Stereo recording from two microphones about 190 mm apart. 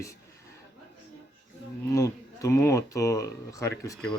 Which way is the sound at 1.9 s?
15° left (ahead or behind).